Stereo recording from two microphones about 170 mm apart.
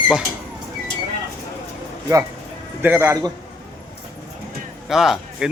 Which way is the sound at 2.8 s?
15° right (ahead or behind).